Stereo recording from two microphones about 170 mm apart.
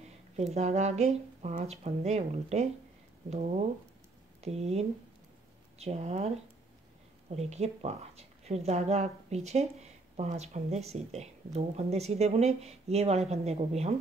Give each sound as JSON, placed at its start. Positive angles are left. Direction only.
{"t": 0.4, "sound": "speech", "side_deg": -40}